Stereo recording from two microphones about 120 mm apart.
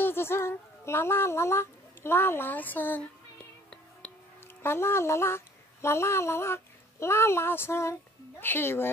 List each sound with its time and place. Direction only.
0.0 s speech: 20° left (ahead or behind)
4.6 s speech: 20° left (ahead or behind)